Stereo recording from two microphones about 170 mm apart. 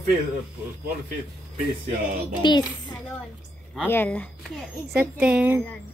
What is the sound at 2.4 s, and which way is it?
Speech, 25° left (ahead or behind).